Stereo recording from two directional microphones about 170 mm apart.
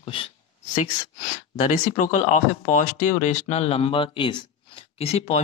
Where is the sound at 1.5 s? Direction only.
45° left (ahead or behind).